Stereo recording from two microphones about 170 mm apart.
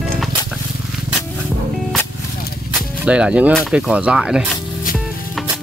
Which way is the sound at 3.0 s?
5° right (ahead or behind).